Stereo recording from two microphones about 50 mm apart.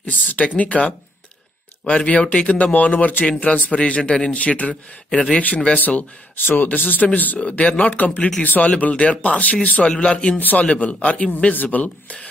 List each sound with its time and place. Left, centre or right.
0.0 s speech: left
5.1 s speech: centre
5.8 s speech: left
7.3 s speech: left
10.4 s speech: left
11.5 s speech: left